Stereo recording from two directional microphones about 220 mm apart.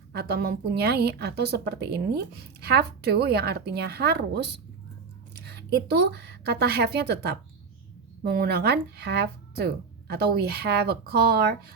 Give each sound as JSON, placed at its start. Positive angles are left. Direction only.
{"t": 0.1, "sound": "a woman's voice", "side_deg": -45}